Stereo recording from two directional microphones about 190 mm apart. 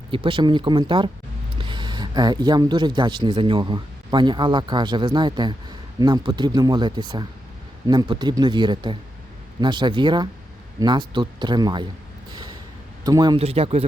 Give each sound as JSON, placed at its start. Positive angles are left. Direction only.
{"t": 0.1, "sound": "speech", "side_deg": -25}
{"t": 13.1, "sound": "speech", "side_deg": -20}